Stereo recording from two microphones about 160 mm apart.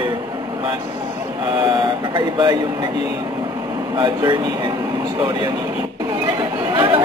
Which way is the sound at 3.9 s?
30° right (ahead or behind).